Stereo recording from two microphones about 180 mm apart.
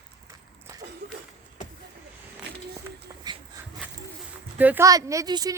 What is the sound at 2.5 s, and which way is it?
Walk, 65° right (ahead or behind).